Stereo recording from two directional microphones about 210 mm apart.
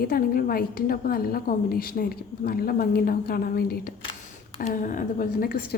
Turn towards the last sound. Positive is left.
turn(degrees=45)  # may be behind; listen again after turning